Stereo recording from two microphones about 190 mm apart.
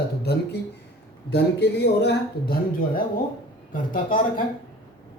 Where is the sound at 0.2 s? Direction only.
60° left (ahead or behind).